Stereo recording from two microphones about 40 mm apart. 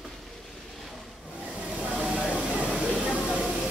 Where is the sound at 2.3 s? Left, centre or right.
Right.